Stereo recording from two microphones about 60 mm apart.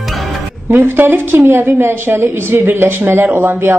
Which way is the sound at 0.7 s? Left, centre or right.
Right.